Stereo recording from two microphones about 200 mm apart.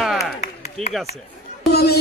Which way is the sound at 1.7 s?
50° left (ahead or behind).